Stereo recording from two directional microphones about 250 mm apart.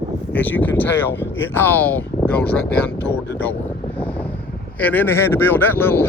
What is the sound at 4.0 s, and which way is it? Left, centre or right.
Vehicle, centre.